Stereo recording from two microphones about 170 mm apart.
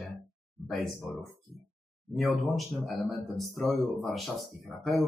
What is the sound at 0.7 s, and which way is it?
Speech, centre (ahead or behind).